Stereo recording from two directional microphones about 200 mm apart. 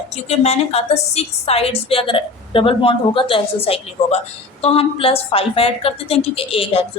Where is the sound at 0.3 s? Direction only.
30° left (ahead or behind).